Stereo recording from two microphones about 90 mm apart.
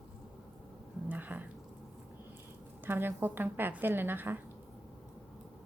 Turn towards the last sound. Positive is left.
turn(degrees=-25)  # may be behind; listen again after turning